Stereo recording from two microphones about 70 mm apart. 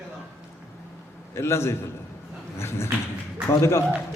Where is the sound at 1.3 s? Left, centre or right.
Left.